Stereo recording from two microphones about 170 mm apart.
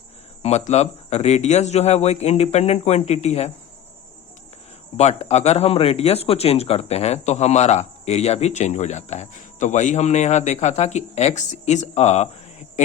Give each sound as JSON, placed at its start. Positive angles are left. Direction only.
{"t": 0.4, "sound": "speech", "side_deg": 40}
{"t": 4.9, "sound": "speech", "side_deg": 40}